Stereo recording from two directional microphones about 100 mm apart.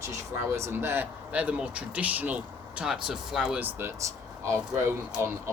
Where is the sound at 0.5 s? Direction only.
25° right (ahead or behind); by 3.6 s 5° right (ahead or behind).